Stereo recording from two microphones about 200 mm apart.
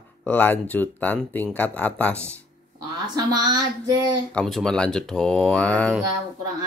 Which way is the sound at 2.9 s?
20° right (ahead or behind).